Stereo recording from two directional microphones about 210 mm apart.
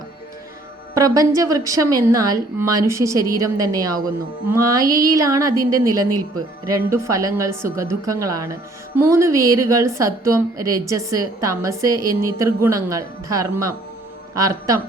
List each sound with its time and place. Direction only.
0.9 s a woman's voice: 15° right (ahead or behind)